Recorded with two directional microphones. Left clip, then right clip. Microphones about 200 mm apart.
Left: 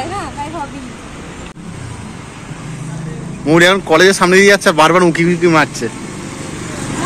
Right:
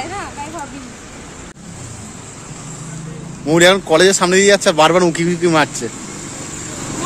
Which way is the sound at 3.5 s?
10° right (ahead or behind).